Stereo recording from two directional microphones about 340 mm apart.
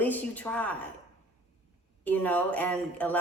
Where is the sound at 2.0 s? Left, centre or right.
Centre.